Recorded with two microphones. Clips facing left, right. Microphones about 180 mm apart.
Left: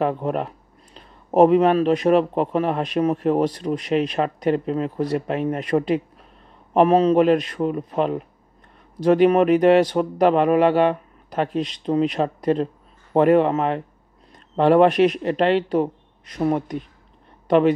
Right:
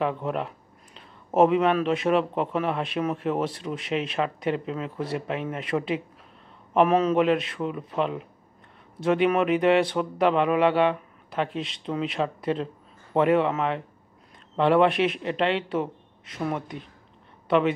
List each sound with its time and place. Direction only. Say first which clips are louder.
0.0 s a man's voice: left 5 dB; 45° left (ahead or behind)